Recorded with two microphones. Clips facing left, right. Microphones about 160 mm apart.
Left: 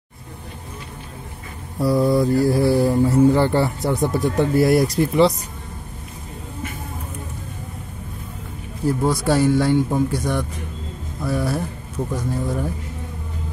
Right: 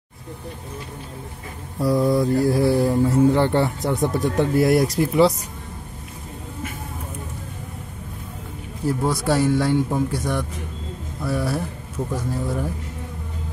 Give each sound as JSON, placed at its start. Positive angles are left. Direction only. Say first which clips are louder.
{"t": 1.8, "sound": "speech", "louder": "left 1 dB", "side_deg": 5}
{"t": 8.8, "sound": "speech", "louder": "left 2 dB", "side_deg": 0}